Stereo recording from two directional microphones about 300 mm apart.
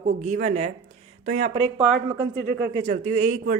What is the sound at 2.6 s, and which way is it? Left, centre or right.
Speech, right.